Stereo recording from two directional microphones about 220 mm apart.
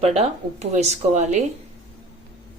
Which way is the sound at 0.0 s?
25° right (ahead or behind).